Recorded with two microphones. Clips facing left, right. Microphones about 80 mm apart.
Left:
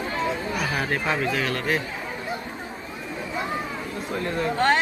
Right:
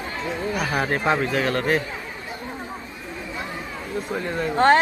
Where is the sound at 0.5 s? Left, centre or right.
Right.